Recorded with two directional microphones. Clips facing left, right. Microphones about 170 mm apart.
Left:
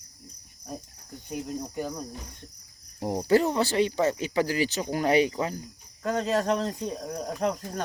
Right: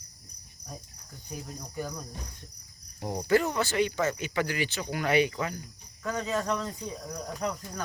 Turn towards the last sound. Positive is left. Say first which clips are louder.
# left 5 dB
turn(degrees=50)  # may be behind; listen again after turning